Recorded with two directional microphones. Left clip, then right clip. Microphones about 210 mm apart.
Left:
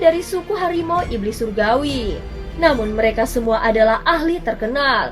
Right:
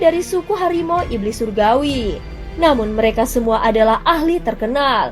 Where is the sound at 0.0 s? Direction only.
30° right (ahead or behind).